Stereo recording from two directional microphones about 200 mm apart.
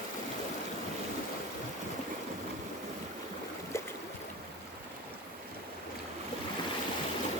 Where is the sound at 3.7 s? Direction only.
15° left (ahead or behind).